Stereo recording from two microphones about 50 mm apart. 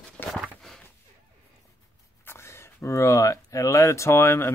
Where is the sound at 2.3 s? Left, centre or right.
Left.